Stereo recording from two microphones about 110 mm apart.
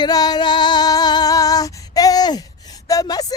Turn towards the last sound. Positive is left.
turn(degrees=35)  # may be behind; listen again after turning